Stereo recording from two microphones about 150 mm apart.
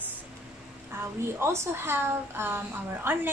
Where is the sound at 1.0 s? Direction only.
15° right (ahead or behind).